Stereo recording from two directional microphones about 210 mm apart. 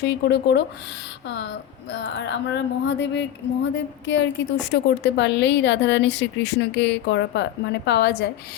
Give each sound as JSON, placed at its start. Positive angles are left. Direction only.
{"t": 0.0, "sound": "speech", "side_deg": 50}